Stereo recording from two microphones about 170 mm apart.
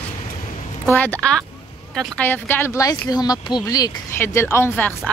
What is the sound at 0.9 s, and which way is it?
A woman's voice, 10° left (ahead or behind).